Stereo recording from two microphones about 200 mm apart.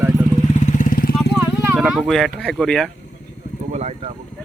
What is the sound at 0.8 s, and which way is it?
Vehicle, 45° left (ahead or behind).